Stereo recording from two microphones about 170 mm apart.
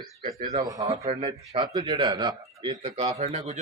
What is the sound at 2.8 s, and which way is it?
Speech, 40° right (ahead or behind).